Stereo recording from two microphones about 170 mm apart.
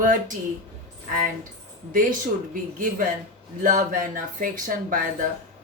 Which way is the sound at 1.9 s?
55° right (ahead or behind).